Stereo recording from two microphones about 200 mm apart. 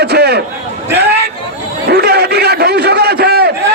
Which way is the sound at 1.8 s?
55° right (ahead or behind).